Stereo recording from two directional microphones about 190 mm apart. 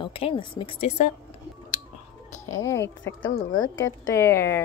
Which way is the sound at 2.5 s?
15° left (ahead or behind).